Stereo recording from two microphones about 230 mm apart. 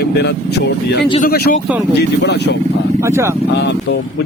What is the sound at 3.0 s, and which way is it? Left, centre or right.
Speech, centre.